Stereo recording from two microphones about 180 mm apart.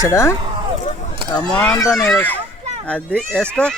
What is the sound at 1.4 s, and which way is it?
Speech, 5° left (ahead or behind).